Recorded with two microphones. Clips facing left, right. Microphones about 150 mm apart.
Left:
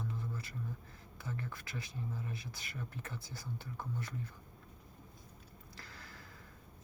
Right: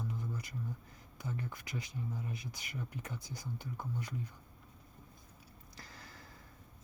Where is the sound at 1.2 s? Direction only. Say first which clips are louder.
Right 2 dB; 15° right (ahead or behind).